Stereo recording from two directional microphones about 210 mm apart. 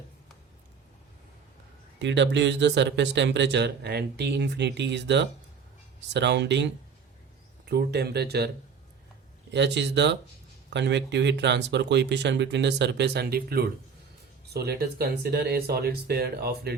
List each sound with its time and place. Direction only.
2.0 s speech: 55° right (ahead or behind)
9.5 s speech: 55° right (ahead or behind)